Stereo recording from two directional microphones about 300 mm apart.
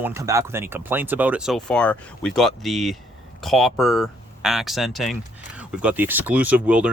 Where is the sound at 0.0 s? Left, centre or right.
Centre.